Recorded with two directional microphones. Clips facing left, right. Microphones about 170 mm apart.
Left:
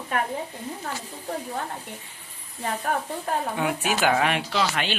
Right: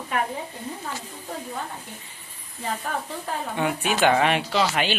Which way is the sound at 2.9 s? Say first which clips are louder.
Left 2 dB; 55° left (ahead or behind).